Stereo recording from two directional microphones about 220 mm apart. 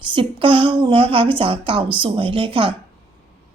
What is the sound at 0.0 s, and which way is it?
A woman's voice, 25° right (ahead or behind).